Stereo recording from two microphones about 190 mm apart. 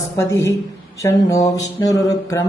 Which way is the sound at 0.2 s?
15° left (ahead or behind).